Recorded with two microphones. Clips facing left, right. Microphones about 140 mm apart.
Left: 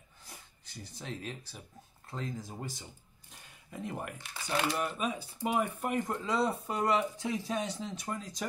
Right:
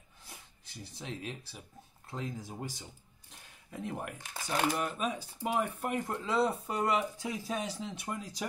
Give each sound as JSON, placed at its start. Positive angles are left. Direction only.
{"t": 1.0, "sound": "speech", "side_deg": 0}
{"t": 2.8, "sound": "a sound", "side_deg": 0}
{"t": 4.2, "sound": "speech", "side_deg": -45}
{"t": 4.7, "sound": "speech", "side_deg": 0}